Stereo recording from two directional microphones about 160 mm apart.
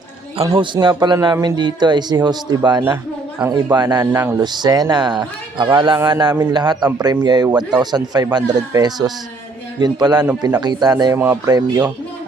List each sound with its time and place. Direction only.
0.5 s speech: 30° right (ahead or behind)
3.3 s speech: 10° right (ahead or behind)
3.8 s speech: 25° right (ahead or behind)